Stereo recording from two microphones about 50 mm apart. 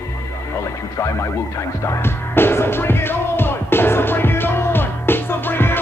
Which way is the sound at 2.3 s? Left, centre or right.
Left.